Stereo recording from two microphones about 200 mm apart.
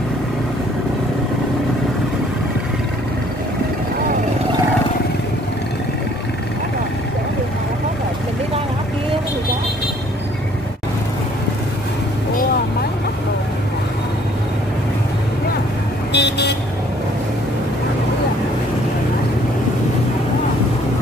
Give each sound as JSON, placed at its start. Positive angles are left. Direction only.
{"t": 16.1, "sound": "vehicle", "side_deg": 60}